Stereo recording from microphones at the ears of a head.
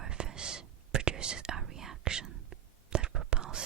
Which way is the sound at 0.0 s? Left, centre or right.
Right.